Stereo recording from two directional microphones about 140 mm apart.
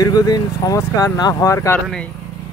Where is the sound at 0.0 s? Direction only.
25° left (ahead or behind).